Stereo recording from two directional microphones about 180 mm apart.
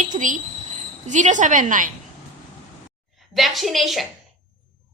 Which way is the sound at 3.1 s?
Centre (ahead or behind).